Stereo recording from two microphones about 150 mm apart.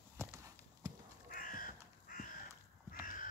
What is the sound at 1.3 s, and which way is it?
Crow, 65° left (ahead or behind).